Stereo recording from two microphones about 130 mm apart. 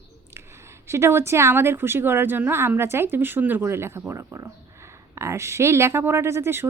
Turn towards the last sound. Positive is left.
turn(degrees=-20)  # may be behind; listen again after turning